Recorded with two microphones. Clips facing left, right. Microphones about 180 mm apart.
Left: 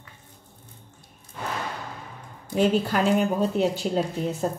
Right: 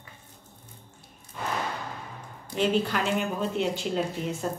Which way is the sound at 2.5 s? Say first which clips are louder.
Left 4 dB; 40° left (ahead or behind).